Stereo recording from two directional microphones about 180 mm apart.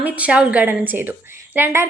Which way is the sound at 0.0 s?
5° right (ahead or behind).